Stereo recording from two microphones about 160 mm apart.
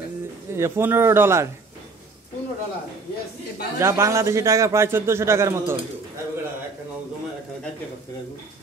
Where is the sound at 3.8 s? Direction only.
15° right (ahead or behind).